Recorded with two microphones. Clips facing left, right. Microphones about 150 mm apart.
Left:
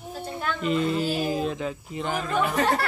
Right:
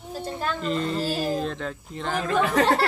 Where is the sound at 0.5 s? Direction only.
5° left (ahead or behind).